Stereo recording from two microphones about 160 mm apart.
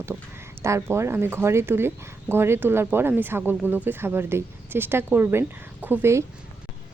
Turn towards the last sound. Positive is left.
turn(degrees=-15)  # may be behind; listen again after turning